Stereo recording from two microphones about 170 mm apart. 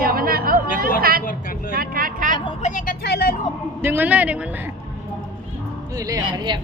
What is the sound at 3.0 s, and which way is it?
Speech, 70° left (ahead or behind).